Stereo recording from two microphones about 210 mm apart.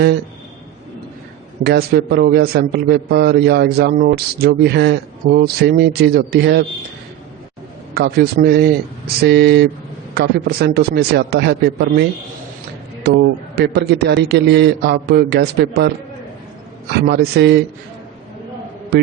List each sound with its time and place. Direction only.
1.6 s a man's voice: 50° right (ahead or behind)
7.9 s a man's voice: 45° right (ahead or behind)
13.1 s a man's voice: 50° right (ahead or behind)
17.1 s a man's voice: 50° right (ahead or behind)